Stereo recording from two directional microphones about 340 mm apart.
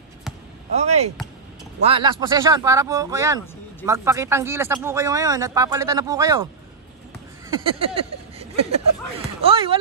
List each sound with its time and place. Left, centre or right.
0.7 s speech: centre
7.4 s speech: centre
9.4 s speech: centre